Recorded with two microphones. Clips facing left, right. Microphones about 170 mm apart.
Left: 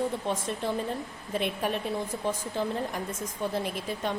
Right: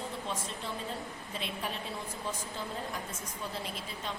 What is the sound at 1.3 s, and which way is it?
Speech, 55° left (ahead or behind).